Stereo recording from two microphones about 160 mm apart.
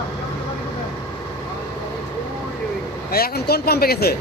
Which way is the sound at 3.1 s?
75° left (ahead or behind).